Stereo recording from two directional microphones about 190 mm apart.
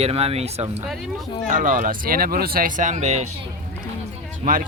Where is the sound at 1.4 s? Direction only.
45° right (ahead or behind).